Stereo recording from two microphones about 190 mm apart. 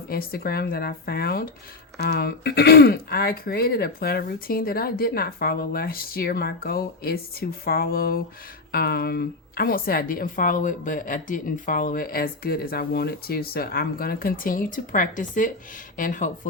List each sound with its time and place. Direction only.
0.1 s a woman's voice: 50° left (ahead or behind)